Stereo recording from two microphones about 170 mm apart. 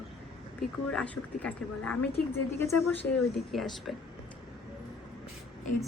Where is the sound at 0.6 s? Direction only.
5° left (ahead or behind).